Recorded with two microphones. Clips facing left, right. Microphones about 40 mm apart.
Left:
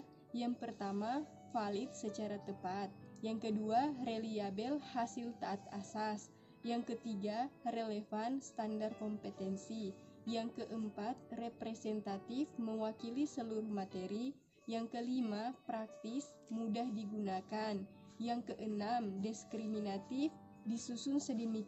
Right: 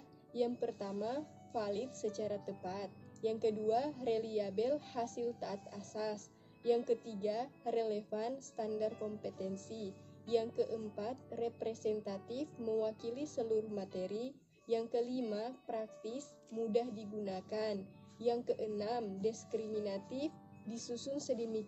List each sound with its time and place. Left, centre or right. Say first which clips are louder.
0.3 s speech: right 5 dB; centre
14.8 s speech: left 1 dB; centre
16.2 s speech: right 1 dB; left
16.7 s speech: right 7 dB; centre
21.3 s speech: right 3 dB; centre